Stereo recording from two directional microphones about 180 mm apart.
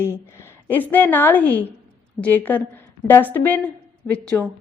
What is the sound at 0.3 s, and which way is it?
A woman's voice, 10° left (ahead or behind).